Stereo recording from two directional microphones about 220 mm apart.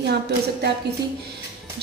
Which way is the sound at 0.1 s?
50° right (ahead or behind).